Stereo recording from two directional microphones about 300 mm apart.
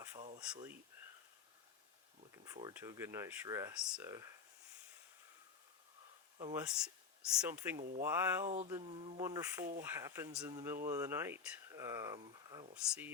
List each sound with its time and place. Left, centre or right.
0.2 s a sound: right
0.5 s speech: centre
2.3 s speech: centre
6.4 s speech: centre